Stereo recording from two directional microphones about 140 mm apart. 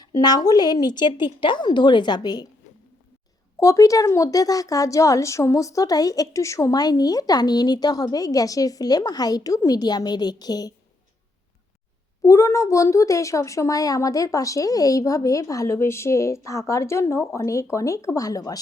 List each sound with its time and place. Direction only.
0.0 s a woman's voice: 30° left (ahead or behind)
3.6 s a woman's voice: 20° left (ahead or behind)
12.2 s a woman's voice: 20° left (ahead or behind)